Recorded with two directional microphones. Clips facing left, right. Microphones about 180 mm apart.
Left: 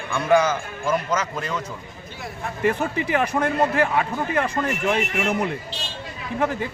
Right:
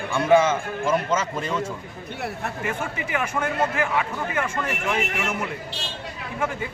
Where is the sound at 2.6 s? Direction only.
35° left (ahead or behind).